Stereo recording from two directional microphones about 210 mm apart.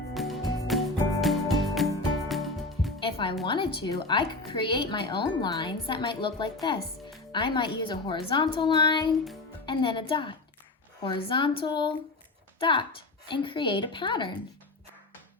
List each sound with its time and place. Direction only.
0.1 s music: centre (ahead or behind)
3.0 s music: 25° left (ahead or behind)
3.4 s speech: 25° left (ahead or behind)